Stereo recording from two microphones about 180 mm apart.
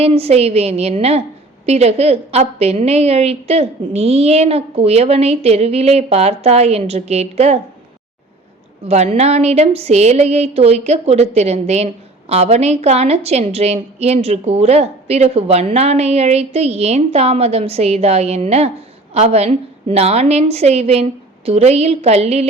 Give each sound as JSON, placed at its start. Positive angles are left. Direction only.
{"t": 0.0, "sound": "a woman's voice", "side_deg": -35}
{"t": 8.9, "sound": "a woman's voice", "side_deg": -35}